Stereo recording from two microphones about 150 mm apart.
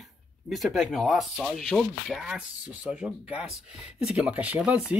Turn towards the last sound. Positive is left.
turn(degrees=-5)  # may be behind; listen again after turning